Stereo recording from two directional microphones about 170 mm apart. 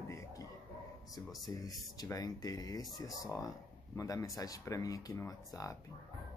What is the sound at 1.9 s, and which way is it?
Speech, 20° left (ahead or behind).